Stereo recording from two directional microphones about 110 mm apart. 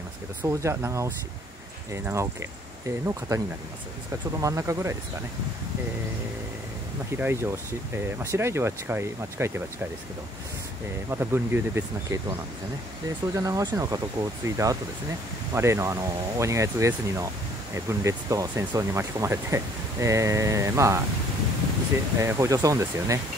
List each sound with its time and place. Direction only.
0.4 s speech: 25° right (ahead or behind)
7.2 s speech: 20° right (ahead or behind)
11.1 s speech: 20° right (ahead or behind)
13.3 s speech: 30° right (ahead or behind)
22.2 s speech: 25° right (ahead or behind)